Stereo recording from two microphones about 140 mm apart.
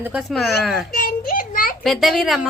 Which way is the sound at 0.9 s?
90° left.